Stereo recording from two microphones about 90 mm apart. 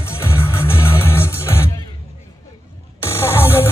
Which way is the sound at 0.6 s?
25° left (ahead or behind).